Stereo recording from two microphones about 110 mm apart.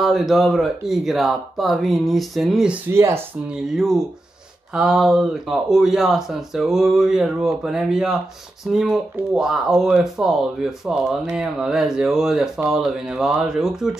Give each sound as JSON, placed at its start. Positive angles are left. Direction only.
{"t": 0.0, "sound": "speech", "side_deg": 0}
{"t": 2.9, "sound": "speech", "side_deg": -25}
{"t": 3.4, "sound": "speech", "side_deg": -5}